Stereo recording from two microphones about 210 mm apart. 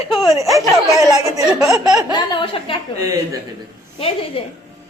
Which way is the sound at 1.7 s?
15° right (ahead or behind).